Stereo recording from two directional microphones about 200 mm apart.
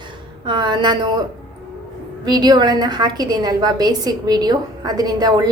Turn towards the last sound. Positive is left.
turn(degrees=-20)  # may be behind; listen again after turning